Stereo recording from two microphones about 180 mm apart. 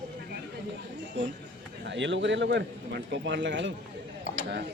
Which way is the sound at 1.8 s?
90° right.